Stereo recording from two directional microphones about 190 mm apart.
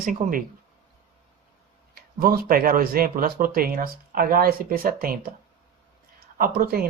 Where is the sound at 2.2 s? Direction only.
50° right (ahead or behind).